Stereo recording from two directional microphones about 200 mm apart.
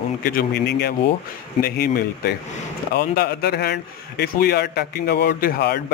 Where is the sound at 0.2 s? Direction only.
45° left (ahead or behind).